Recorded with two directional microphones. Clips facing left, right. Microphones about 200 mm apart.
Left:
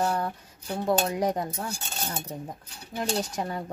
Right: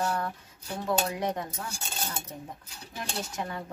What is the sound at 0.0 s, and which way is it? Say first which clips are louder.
Dishes: left 3 dB; 30° left (ahead or behind).